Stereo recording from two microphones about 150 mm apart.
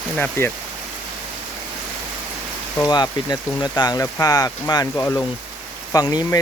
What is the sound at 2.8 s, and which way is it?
Speech, 25° left (ahead or behind).